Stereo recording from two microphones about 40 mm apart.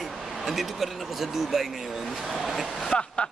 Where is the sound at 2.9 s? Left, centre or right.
Left.